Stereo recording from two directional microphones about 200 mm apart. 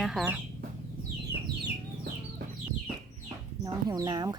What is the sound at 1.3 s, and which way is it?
Chicken, 45° right (ahead or behind).